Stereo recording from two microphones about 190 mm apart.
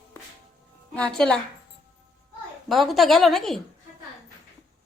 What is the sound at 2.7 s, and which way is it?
Speech, centre (ahead or behind).